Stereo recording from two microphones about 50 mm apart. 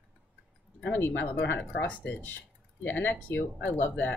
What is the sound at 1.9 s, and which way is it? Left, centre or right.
Speech, left.